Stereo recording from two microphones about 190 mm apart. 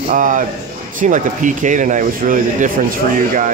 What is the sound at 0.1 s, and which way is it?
Speech, 45° right (ahead or behind).